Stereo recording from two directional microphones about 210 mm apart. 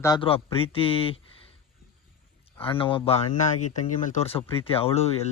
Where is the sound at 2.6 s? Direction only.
25° left (ahead or behind).